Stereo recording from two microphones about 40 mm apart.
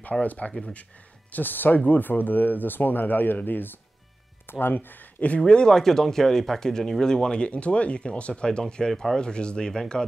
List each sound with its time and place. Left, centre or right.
0.2 s speech: left
1.3 s speech: left
4.5 s speech: left
5.5 s speech: left
5.8 s speech: centre
8.9 s speech: centre
9.2 s speech: left